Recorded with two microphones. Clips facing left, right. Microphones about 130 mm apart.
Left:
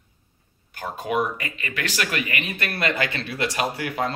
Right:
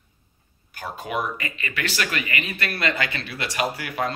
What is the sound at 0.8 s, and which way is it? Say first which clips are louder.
Speech: left 3 dB; 20° left (ahead or behind).